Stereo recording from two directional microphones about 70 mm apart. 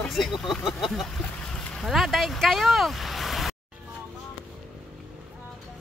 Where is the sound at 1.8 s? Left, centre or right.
Centre.